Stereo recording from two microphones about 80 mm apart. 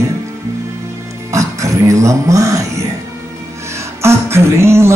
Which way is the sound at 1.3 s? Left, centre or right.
Right.